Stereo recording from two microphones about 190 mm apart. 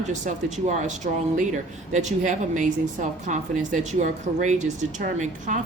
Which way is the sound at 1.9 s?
40° right (ahead or behind).